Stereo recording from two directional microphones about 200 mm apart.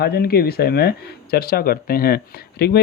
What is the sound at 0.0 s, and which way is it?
Speech, 50° left (ahead or behind).